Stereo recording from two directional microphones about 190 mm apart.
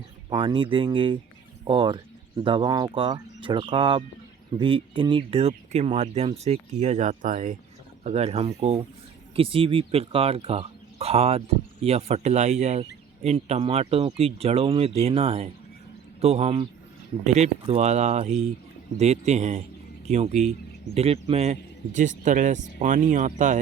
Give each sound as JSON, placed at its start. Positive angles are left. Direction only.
{"t": 0.3, "sound": "speech", "side_deg": -25}